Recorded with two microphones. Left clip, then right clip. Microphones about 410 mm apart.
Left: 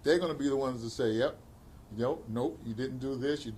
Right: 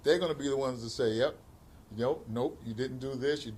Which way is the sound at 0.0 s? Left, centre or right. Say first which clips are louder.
Even; centre.